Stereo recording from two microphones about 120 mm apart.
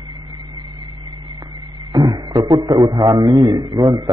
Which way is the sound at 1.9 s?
35° right (ahead or behind).